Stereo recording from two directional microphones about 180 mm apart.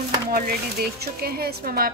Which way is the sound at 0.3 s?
60° right (ahead or behind).